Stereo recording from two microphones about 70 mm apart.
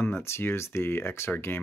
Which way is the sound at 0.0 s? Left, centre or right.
Left.